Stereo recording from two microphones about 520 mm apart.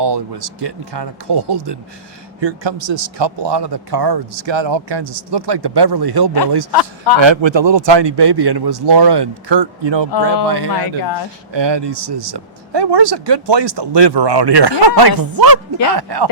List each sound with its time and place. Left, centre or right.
0.0 s speech: right
6.7 s a man's voice: left
7.2 s speech: right
10.7 s speech: left
11.5 s speech: right